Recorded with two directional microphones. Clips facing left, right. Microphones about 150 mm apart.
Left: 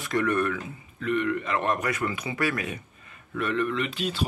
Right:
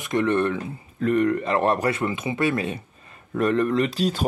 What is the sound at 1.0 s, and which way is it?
Speech, 40° right (ahead or behind).